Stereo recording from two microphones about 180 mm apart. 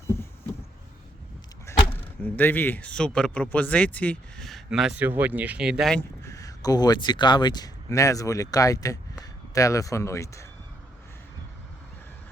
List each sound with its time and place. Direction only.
1.6 s speech: 10° left (ahead or behind)
6.2 s speech: 20° left (ahead or behind)